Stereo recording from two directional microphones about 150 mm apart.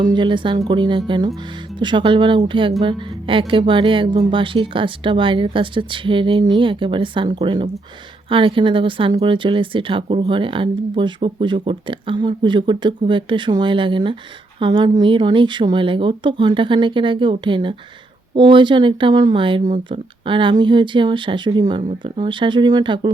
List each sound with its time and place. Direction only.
0.0 s speech: 30° right (ahead or behind)